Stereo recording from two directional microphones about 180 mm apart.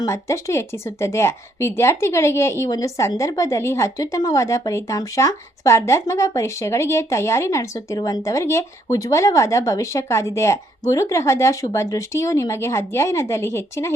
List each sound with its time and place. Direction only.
0.0 s a woman's voice: 15° left (ahead or behind)